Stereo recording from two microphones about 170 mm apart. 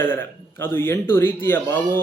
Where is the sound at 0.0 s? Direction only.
15° left (ahead or behind).